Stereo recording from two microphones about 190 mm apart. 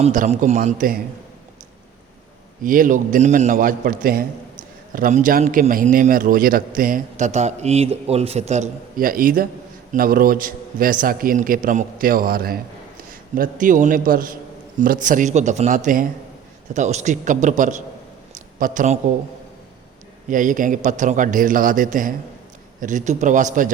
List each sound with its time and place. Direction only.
0.0 s a man's voice: 40° right (ahead or behind)
2.6 s a man's voice: 45° right (ahead or behind)
20.3 s a man's voice: 45° right (ahead or behind)